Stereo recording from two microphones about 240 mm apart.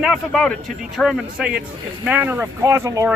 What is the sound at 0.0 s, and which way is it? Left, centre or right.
A man's voice, centre.